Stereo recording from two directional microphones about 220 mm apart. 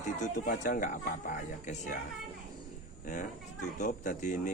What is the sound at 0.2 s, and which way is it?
Speech, 35° left (ahead or behind).